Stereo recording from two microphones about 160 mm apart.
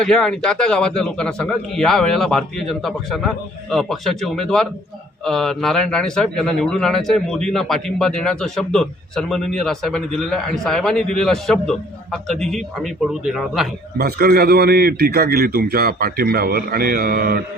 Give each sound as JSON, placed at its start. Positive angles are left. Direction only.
{"t": 0.0, "sound": "a man's voice", "side_deg": 5}
{"t": 14.0, "sound": "a man's voice", "side_deg": -70}